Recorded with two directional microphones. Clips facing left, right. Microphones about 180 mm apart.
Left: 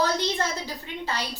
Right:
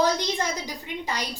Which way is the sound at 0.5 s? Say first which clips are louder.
Right 1 dB; 15° right (ahead or behind).